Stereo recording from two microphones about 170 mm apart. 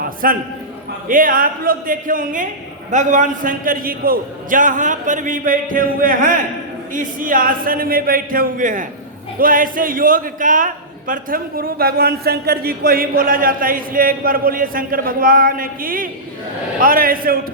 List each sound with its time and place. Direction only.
0.2 s a man's voice: 60° right (ahead or behind)